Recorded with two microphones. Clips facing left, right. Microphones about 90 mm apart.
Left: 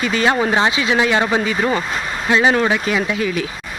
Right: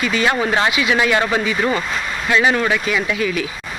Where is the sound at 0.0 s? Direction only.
30° left (ahead or behind).